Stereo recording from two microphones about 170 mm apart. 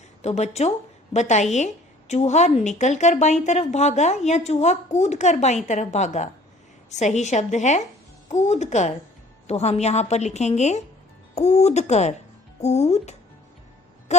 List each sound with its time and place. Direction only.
0.2 s a woman's voice: 40° left (ahead or behind)
14.1 s music: 40° left (ahead or behind)